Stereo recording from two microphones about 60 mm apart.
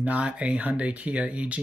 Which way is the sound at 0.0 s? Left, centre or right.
Right.